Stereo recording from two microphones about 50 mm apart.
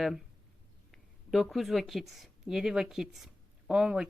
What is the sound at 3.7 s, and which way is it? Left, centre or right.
Speech, right.